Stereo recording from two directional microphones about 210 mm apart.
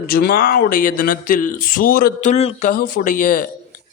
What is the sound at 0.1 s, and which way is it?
Speech, 45° left (ahead or behind).